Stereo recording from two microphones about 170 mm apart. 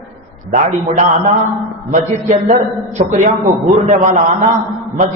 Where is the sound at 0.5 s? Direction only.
45° right (ahead or behind).